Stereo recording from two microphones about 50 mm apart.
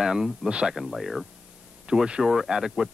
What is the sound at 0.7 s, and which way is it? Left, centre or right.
Speech, centre.